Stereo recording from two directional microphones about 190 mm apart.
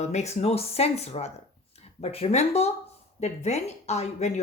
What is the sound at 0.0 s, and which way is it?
Speech, 35° left (ahead or behind).